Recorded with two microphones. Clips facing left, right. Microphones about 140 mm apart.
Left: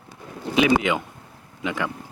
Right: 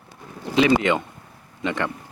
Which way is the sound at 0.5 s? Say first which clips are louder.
Right 1 dB; 5° left (ahead or behind).